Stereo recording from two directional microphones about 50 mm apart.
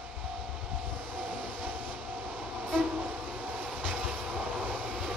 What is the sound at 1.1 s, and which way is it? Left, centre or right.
Train, right.